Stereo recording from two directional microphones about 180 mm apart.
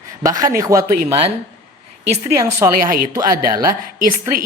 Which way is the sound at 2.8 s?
50° right (ahead or behind).